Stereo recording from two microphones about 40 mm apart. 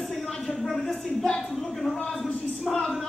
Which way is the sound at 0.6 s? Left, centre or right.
Centre.